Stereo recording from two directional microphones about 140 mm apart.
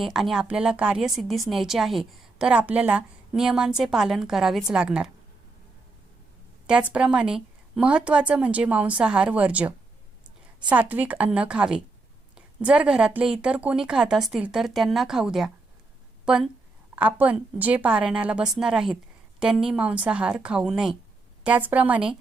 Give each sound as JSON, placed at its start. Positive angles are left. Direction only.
{"t": 0.0, "sound": "a woman's voice", "side_deg": 0}
{"t": 6.9, "sound": "a woman's voice", "side_deg": -5}